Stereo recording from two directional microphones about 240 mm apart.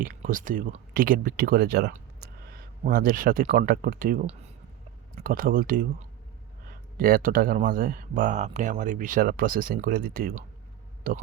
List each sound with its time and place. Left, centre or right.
0.0 s speech: right
6.9 s speech: right